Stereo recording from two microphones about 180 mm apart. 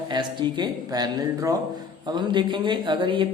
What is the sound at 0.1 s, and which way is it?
Speech, 25° right (ahead or behind).